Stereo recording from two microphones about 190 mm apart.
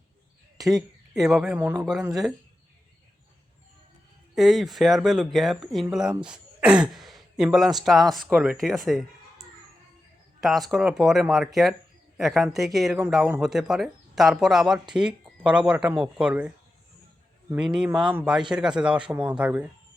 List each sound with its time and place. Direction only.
0.7 s speech: centre (ahead or behind)
4.4 s speech: centre (ahead or behind)
6.9 s a sound: centre (ahead or behind)
7.9 s speech: centre (ahead or behind)
10.4 s speech: centre (ahead or behind)
17.5 s speech: 5° right (ahead or behind)